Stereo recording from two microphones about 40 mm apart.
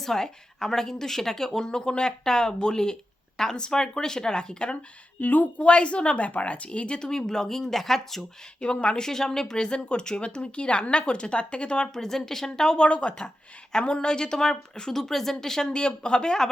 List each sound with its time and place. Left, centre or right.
0.0 s a woman's voice: centre
5.2 s a woman's voice: left
5.6 s speech: left; by 8.2 s centre
8.6 s speech: left
11.9 s a woman's voice: centre
15.7 s speech: left